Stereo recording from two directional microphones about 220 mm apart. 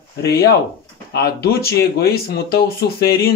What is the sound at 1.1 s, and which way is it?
Speech, 45° left (ahead or behind).